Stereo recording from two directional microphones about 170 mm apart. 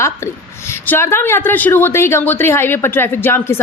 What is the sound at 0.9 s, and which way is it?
A woman's voice, 15° left (ahead or behind).